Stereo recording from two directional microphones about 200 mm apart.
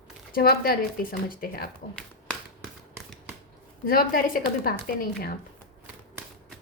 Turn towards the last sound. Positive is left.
turn(degrees=45)  # may be behind; listen again after turning